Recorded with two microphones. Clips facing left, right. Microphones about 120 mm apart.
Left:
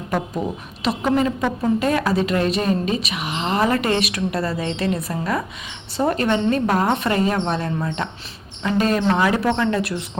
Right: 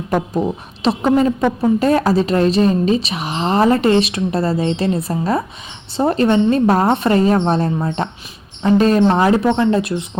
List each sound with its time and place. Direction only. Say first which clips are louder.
0.1 s a woman's voice: right 5 dB; 30° right (ahead or behind)
9.4 s a woman's voice: right 5 dB; 25° right (ahead or behind)